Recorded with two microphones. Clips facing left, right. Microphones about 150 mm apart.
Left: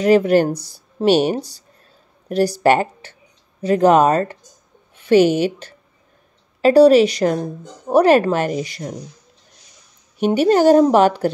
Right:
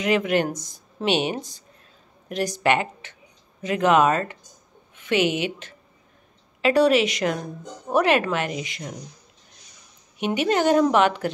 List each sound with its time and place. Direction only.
0.0 s a woman's voice: 35° left (ahead or behind)
10.1 s speech: 35° left (ahead or behind)